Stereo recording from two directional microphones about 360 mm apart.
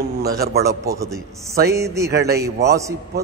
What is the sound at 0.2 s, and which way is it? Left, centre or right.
Speech, right.